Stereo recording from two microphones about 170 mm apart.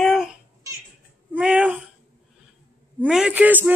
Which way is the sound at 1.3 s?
5° right (ahead or behind).